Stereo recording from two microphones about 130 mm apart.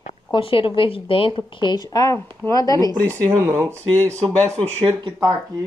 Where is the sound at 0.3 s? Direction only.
45° left (ahead or behind); by 2.9 s 25° left (ahead or behind).